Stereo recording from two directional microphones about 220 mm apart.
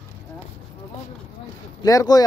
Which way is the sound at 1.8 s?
15° left (ahead or behind).